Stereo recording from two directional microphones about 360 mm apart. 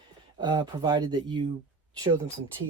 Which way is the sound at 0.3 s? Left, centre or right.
Centre.